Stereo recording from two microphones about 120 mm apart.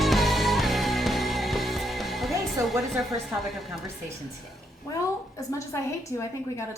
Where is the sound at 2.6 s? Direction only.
25° right (ahead or behind).